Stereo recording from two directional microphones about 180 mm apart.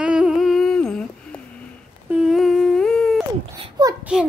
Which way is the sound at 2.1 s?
Centre (ahead or behind).